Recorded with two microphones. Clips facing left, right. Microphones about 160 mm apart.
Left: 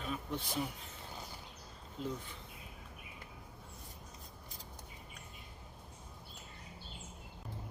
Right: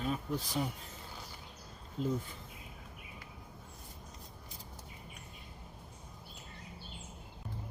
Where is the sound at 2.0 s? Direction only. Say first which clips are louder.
Right 5 dB; 40° right (ahead or behind).